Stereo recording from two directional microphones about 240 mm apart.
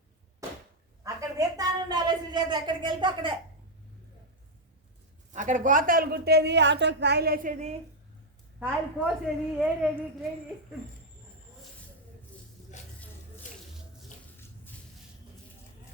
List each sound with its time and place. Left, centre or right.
1.0 s a sound: centre
5.3 s a woman's voice: right
8.5 s a woman's voice: centre